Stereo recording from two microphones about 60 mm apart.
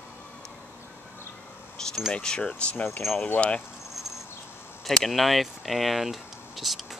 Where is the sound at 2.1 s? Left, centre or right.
Centre.